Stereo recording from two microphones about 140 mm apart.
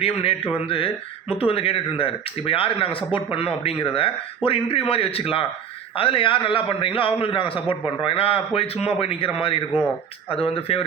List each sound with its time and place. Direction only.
0.0 s a man's voice: 45° left (ahead or behind)